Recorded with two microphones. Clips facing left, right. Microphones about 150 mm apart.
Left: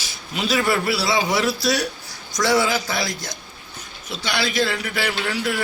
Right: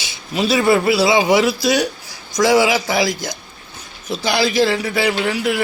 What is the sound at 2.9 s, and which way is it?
Speech, 90° right.